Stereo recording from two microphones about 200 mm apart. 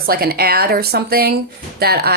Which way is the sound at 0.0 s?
50° right (ahead or behind).